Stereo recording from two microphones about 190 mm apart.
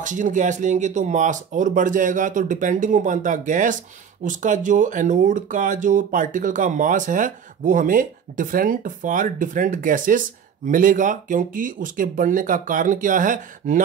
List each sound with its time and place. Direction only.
0.0 s speech: 40° right (ahead or behind)